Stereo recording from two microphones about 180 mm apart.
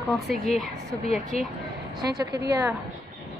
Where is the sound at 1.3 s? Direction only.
35° left (ahead or behind).